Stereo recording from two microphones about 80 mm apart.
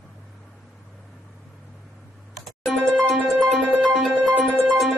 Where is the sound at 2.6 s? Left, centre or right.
Centre.